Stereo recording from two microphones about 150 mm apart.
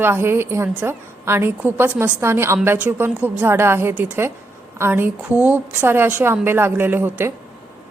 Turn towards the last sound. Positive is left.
turn(degrees=-15)  # may be behind; listen again after turning